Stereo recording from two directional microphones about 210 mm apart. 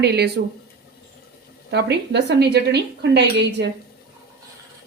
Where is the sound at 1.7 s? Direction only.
55° right (ahead or behind).